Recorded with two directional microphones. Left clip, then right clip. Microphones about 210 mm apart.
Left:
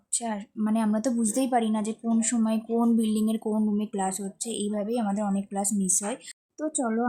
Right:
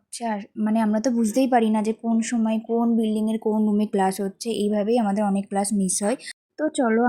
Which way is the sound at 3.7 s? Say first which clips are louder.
Right 7 dB; 20° right (ahead or behind).